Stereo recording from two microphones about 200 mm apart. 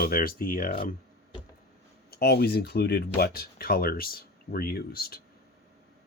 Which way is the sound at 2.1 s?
55° left (ahead or behind).